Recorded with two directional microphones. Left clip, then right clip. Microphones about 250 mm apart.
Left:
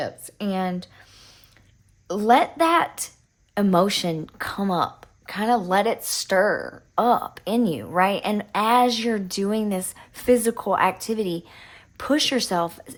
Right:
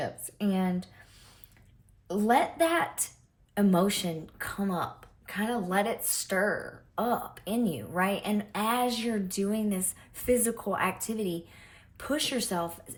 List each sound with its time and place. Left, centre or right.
0.0 s speech: centre
2.0 s speech: centre